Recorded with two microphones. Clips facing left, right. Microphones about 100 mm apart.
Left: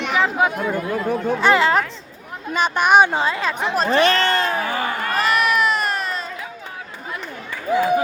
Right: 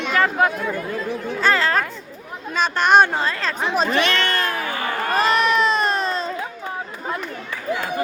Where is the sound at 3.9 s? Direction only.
35° left (ahead or behind).